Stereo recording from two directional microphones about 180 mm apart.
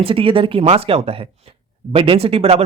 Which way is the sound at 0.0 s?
30° right (ahead or behind).